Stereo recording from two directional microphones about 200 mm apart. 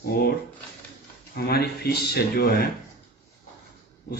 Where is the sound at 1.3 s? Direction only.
50° left (ahead or behind).